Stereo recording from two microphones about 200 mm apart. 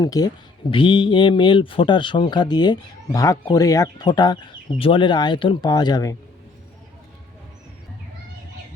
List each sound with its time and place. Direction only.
0.0 s speech: 20° left (ahead or behind)